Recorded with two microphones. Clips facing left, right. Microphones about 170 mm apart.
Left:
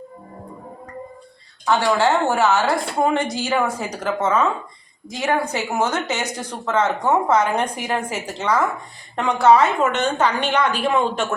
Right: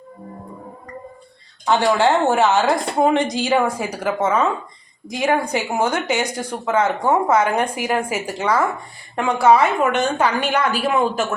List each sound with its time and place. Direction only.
1.6 s a woman's voice: 20° right (ahead or behind)